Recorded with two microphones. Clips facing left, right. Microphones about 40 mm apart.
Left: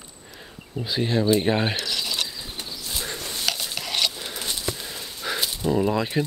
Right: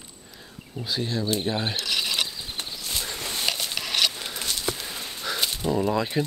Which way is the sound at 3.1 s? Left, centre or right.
Right.